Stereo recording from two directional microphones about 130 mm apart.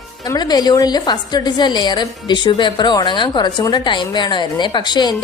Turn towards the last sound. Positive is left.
turn(degrees=35)  # may be behind; listen again after turning